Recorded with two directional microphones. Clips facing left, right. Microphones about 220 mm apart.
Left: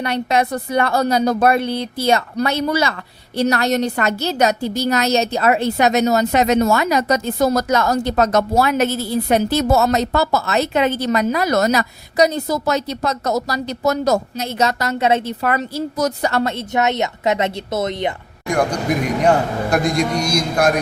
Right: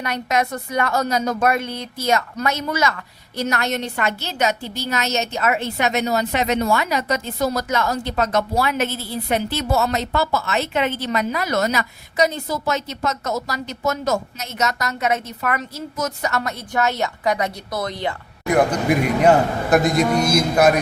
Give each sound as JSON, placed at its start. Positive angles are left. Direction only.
{"t": 0.0, "sound": "a woman's voice", "side_deg": 30}
{"t": 18.4, "sound": "a man's voice", "side_deg": -5}